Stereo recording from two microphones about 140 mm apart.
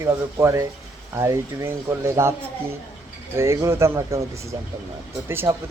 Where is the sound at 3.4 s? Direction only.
20° right (ahead or behind).